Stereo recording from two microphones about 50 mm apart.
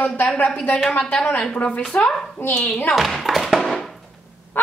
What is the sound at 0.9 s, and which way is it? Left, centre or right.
A woman's voice, centre.